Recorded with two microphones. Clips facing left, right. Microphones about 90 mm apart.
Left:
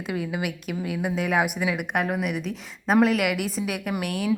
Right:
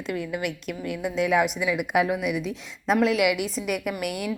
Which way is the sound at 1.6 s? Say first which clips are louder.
Right 2 dB; 60° left (ahead or behind).